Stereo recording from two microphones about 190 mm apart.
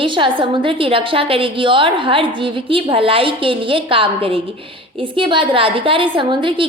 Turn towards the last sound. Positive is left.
turn(degrees=-25)  # may be behind; listen again after turning